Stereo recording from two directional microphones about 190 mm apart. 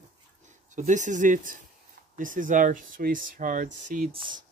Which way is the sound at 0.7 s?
40° right (ahead or behind).